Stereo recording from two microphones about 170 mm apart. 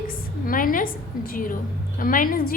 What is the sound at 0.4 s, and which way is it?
A woman's voice, 55° left (ahead or behind).